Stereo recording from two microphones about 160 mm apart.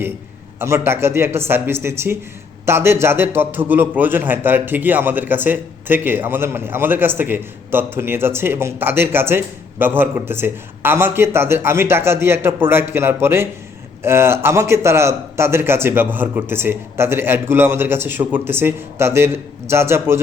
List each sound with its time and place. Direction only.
0.6 s a man's voice: 15° right (ahead or behind)